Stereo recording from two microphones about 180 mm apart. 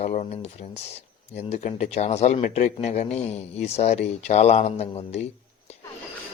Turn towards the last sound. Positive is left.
turn(degrees=35)  # may be behind; listen again after turning